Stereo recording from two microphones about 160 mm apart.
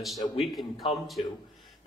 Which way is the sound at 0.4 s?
Centre (ahead or behind).